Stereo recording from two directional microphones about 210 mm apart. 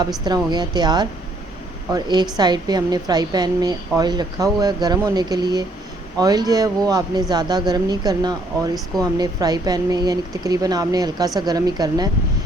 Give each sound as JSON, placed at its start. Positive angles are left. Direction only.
{"t": 0.3, "sound": "a woman's voice", "side_deg": -20}